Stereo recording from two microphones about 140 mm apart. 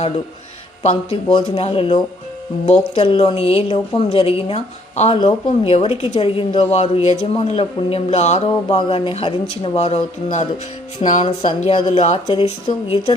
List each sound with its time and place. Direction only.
0.8 s a woman's voice: 40° left (ahead or behind)
12.1 s speech: 35° left (ahead or behind)